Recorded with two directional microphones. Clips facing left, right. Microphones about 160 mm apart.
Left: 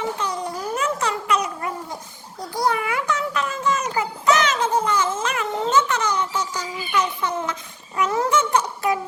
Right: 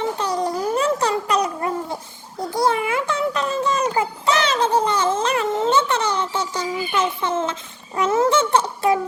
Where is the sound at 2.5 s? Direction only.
25° right (ahead or behind).